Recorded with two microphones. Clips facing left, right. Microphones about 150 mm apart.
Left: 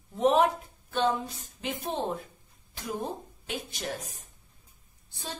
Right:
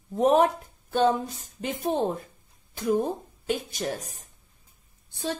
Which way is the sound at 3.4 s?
45° right (ahead or behind).